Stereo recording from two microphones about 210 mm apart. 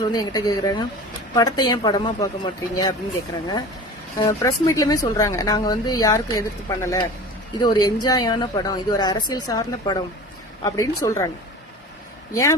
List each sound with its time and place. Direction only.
0.0 s a woman's voice: 20° left (ahead or behind)
4.2 s a woman's voice: 15° left (ahead or behind)
12.3 s speech: 15° left (ahead or behind)